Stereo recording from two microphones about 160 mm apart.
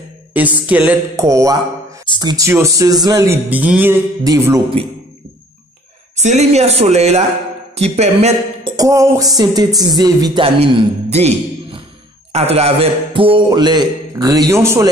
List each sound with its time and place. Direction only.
0.3 s speech: 10° right (ahead or behind)
1.1 s a man's voice: 20° right (ahead or behind)
6.1 s a man's voice: 45° right (ahead or behind)
8.6 s a man's voice: 20° right (ahead or behind)
10.4 s a man's voice: 35° right (ahead or behind); by 14.9 s 15° right (ahead or behind)